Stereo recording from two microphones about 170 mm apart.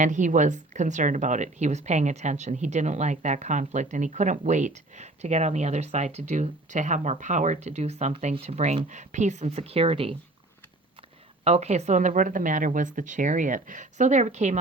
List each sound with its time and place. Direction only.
0.0 s a woman's voice: 45° right (ahead or behind)
11.4 s a woman's voice: 40° right (ahead or behind)